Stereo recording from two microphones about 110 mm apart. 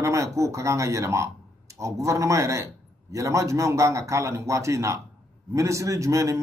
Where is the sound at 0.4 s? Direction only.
30° right (ahead or behind).